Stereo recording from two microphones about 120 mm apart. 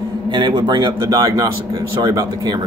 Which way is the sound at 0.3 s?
40° right (ahead or behind).